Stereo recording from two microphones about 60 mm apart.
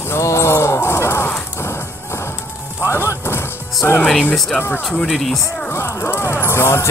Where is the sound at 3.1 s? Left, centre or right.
Left.